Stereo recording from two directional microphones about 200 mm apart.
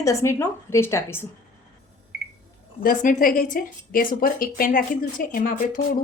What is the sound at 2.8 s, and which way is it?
Speech, 40° left (ahead or behind).